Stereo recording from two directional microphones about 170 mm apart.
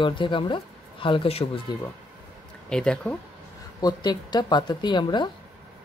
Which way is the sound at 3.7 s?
25° left (ahead or behind).